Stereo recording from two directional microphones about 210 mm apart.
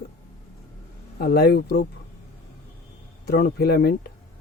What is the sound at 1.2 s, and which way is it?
Speech, 50° left (ahead or behind).